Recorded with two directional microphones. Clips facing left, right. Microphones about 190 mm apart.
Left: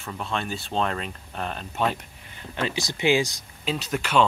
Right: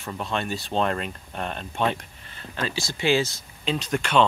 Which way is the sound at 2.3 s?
20° left (ahead or behind).